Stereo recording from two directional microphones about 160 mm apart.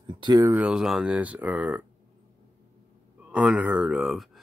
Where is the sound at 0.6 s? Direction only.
5° right (ahead or behind).